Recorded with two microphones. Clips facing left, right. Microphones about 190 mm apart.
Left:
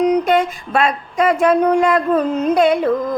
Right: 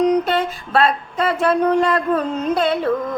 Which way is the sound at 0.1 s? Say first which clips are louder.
Left 3 dB; 15° left (ahead or behind).